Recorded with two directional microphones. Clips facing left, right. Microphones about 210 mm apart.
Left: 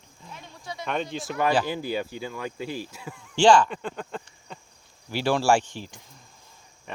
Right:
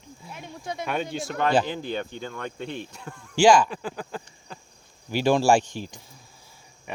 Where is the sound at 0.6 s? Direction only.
50° right (ahead or behind).